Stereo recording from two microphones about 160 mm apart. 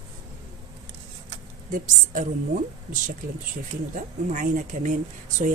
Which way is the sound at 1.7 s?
55° right (ahead or behind).